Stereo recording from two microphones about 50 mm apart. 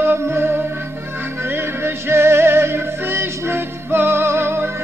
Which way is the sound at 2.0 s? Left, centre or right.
Right.